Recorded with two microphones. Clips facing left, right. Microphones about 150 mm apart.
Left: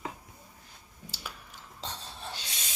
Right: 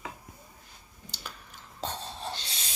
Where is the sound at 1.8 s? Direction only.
50° right (ahead or behind).